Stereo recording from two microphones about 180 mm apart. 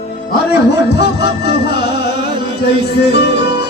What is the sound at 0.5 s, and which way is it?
Music, 65° left (ahead or behind).